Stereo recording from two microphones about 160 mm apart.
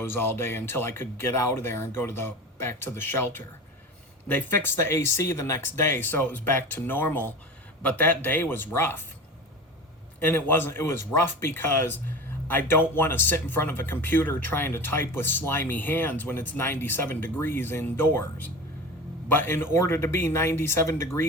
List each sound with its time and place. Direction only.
0.0 s speech: 15° left (ahead or behind)
10.2 s speech: 10° left (ahead or behind)